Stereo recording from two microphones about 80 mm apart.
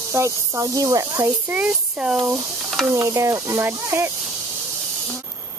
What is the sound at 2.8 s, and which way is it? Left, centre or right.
Speech, right.